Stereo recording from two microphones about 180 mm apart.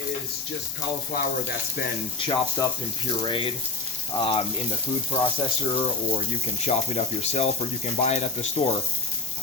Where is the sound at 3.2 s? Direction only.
30° left (ahead or behind).